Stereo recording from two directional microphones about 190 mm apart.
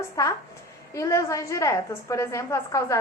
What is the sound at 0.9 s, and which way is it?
A woman's voice, 15° left (ahead or behind).